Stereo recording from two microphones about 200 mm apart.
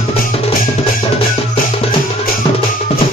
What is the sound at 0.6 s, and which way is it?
Music, 45° left (ahead or behind).